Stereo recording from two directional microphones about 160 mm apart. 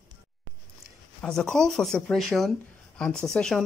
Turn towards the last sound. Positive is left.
turn(degrees=5)  # may be behind; listen again after turning